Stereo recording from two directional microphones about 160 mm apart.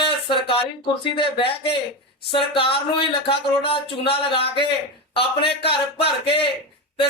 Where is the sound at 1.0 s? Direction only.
30° left (ahead or behind).